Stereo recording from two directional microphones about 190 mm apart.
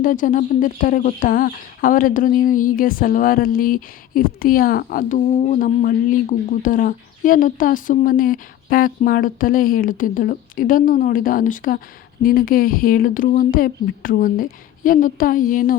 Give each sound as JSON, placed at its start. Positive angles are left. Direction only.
{"t": 0.0, "sound": "a woman's voice", "side_deg": 45}